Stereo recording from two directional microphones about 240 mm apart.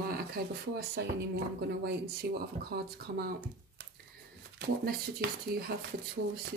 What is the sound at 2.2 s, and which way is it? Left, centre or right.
Speech, right.